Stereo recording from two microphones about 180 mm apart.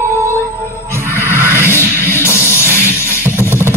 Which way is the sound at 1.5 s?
15° left (ahead or behind).